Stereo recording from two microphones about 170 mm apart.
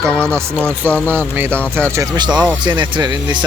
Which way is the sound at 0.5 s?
10° left (ahead or behind).